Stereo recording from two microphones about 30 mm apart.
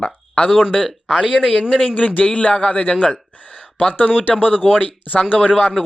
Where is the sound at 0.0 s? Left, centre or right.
Left.